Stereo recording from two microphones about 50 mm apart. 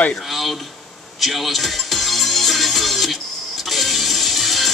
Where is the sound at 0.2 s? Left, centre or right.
Centre.